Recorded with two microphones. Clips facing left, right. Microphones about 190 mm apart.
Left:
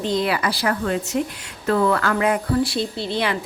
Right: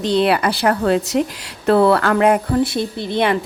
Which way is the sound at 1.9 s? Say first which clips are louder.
Right 6 dB; 60° right (ahead or behind).